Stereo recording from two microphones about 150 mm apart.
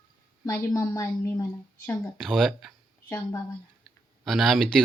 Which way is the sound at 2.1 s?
Centre (ahead or behind).